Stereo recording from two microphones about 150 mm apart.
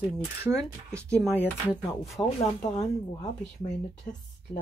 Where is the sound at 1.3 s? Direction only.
10° right (ahead or behind).